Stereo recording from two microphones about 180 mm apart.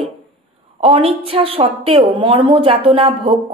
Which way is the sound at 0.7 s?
30° right (ahead or behind).